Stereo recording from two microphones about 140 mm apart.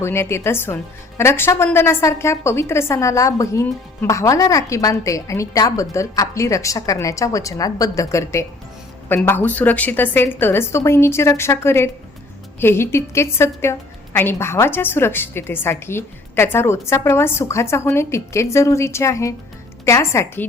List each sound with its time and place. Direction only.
0.0 s a woman's voice: 20° left (ahead or behind)